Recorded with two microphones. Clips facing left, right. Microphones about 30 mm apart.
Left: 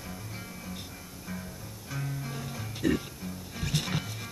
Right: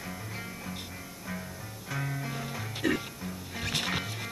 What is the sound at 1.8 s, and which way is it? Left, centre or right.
Music, right.